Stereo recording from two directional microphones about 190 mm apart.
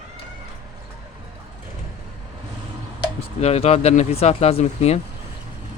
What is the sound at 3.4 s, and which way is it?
Speech, 35° left (ahead or behind).